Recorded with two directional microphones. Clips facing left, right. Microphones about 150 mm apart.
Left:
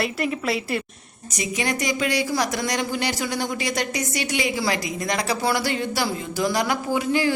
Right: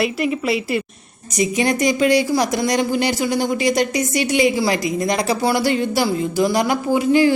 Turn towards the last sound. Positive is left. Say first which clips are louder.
# right 7 dB
turn(degrees=-20)  # may be behind; listen again after turning